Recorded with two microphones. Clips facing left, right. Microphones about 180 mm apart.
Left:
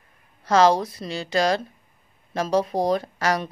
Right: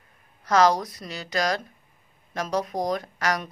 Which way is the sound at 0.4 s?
30° left (ahead or behind).